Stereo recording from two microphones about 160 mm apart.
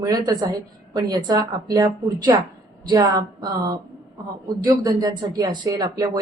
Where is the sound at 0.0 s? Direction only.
25° right (ahead or behind).